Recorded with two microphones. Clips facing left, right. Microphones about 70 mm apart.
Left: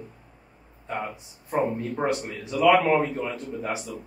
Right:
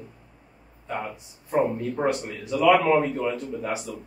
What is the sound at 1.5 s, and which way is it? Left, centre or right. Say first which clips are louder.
A man's voice: right 2 dB; centre.